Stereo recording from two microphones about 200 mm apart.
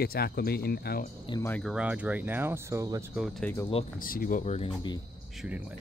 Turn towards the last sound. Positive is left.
turn(degrees=-5)  # may be behind; listen again after turning